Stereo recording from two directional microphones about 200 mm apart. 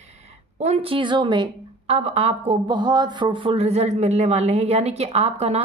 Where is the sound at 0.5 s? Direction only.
35° right (ahead or behind).